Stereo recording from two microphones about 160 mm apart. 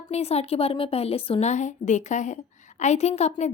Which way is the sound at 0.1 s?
40° left (ahead or behind).